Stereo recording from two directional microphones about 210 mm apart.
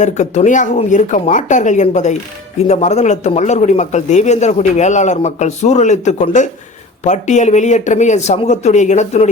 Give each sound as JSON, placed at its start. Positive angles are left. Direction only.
{"t": 0.0, "sound": "a man's voice", "side_deg": 35}